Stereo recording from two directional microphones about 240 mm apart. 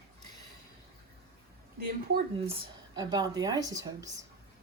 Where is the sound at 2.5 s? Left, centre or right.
Centre.